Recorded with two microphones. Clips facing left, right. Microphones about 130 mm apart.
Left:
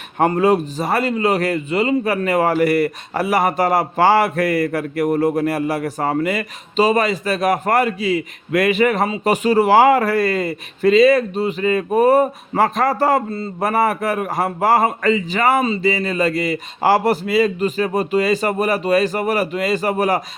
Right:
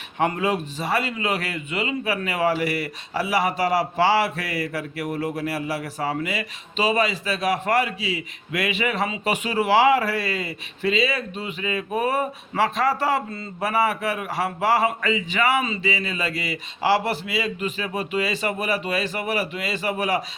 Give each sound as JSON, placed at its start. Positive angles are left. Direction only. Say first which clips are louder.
{"t": 0.2, "sound": "speech", "louder": "left 8 dB", "side_deg": 45}